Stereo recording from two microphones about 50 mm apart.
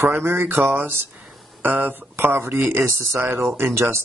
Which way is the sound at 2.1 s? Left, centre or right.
Right.